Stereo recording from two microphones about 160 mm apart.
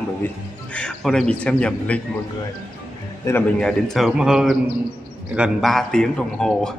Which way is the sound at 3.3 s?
20° left (ahead or behind).